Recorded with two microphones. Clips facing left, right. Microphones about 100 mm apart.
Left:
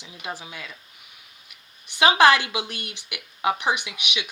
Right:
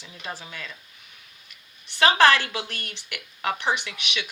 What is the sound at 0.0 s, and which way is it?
Speech, 15° left (ahead or behind).